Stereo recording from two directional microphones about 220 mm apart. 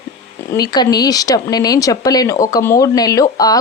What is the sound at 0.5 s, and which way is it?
Speech, 20° left (ahead or behind).